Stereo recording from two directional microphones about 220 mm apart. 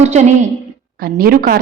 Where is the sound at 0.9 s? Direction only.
40° right (ahead or behind).